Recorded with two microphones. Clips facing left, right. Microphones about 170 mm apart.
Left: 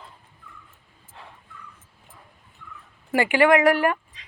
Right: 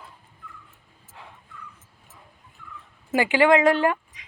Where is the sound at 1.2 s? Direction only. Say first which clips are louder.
Even; 15° right (ahead or behind).